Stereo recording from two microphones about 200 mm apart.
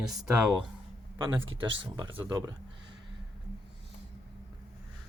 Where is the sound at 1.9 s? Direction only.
20° right (ahead or behind).